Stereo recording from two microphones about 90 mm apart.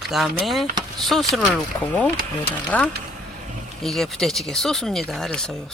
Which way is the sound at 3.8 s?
Centre (ahead or behind).